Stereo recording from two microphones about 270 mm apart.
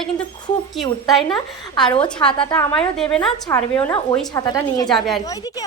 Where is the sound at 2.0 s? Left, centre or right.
Centre.